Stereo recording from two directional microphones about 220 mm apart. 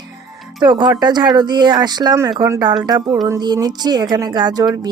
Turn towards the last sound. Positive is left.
turn(degrees=-20)  # may be behind; listen again after turning